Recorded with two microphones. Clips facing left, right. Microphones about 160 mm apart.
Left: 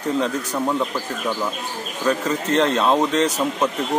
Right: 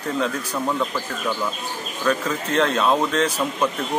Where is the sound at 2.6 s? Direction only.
15° left (ahead or behind).